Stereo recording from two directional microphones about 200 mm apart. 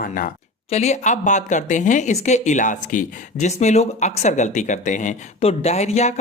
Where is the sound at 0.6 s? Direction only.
35° left (ahead or behind).